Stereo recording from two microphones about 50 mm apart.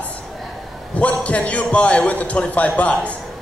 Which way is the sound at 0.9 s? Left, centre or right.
Left.